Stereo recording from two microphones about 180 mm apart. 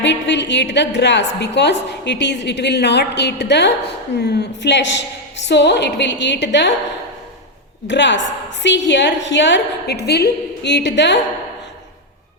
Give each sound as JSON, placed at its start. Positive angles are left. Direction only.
{"t": 0.0, "sound": "a woman's voice", "side_deg": 75}
{"t": 7.9, "sound": "a woman's voice", "side_deg": 80}